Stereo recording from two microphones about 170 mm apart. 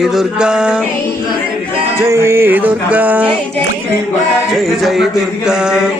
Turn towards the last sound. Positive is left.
turn(degrees=-5)  # may be behind; listen again after turning